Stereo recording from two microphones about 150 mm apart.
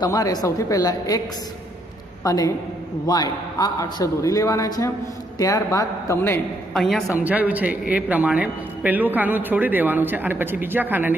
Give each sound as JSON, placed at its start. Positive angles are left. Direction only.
{"t": 0.0, "sound": "a man's voice", "side_deg": 25}
{"t": 2.2, "sound": "a man's voice", "side_deg": 25}
{"t": 6.7, "sound": "a man's voice", "side_deg": 0}
{"t": 7.2, "sound": "a man's voice", "side_deg": -10}